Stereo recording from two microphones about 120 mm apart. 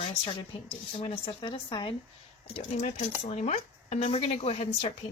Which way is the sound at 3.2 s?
75° left (ahead or behind).